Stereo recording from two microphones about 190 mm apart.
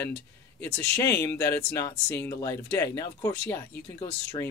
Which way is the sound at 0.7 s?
10° left (ahead or behind).